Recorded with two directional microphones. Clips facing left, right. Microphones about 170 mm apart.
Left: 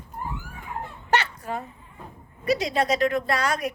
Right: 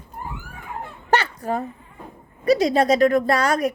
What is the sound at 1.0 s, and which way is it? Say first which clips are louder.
Fowl: right 4 dB; 35° right (ahead or behind).